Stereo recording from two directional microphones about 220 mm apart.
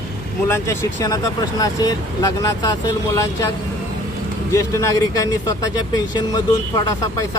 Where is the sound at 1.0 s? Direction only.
15° left (ahead or behind).